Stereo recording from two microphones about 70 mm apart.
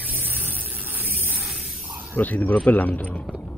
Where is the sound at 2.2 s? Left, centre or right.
Left.